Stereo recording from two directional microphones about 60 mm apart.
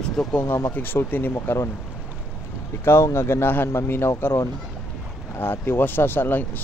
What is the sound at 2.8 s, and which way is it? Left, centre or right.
Speech, left.